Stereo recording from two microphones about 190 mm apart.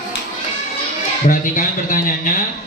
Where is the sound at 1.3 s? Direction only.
45° left (ahead or behind).